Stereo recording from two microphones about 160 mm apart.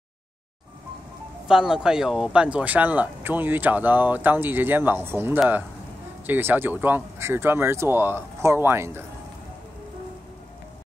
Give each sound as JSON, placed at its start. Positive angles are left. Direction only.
{"t": 1.5, "sound": "speech", "side_deg": -5}